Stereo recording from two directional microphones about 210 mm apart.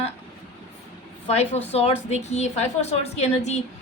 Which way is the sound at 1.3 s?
30° left (ahead or behind).